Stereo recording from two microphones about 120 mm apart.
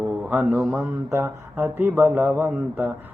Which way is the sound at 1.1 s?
20° right (ahead or behind).